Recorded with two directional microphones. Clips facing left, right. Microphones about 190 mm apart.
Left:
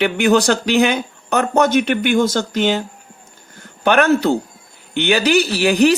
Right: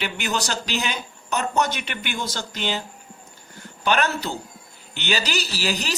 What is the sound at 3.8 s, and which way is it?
Speech, 55° left (ahead or behind).